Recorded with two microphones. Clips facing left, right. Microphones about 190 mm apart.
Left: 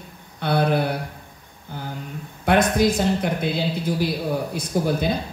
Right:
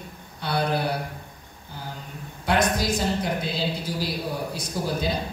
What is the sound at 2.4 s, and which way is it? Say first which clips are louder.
A man's voice: left 5 dB; 55° left (ahead or behind).